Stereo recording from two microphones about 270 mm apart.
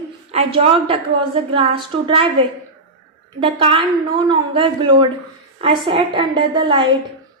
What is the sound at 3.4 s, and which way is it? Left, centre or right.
A woman's voice, centre.